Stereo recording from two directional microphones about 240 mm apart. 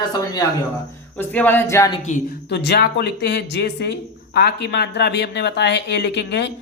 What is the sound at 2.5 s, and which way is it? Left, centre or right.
Speech, left.